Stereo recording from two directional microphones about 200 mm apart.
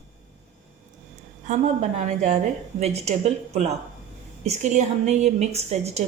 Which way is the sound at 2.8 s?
30° right (ahead or behind).